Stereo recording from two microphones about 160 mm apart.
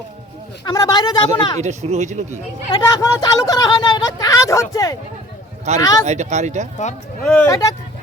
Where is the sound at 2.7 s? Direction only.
25° left (ahead or behind).